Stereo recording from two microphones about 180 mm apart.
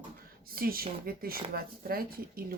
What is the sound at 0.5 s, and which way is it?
Speech, 55° right (ahead or behind).